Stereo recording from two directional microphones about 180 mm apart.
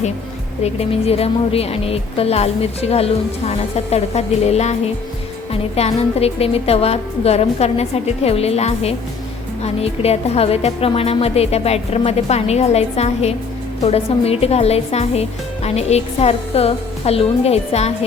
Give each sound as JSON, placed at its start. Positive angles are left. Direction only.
{"t": 0.6, "sound": "speech", "side_deg": 35}